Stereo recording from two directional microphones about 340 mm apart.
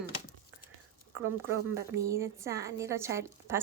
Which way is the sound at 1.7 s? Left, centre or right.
Centre.